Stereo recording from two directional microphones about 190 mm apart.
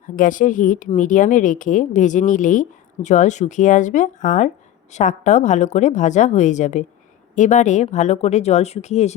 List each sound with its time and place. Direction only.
0.2 s speech: 45° left (ahead or behind)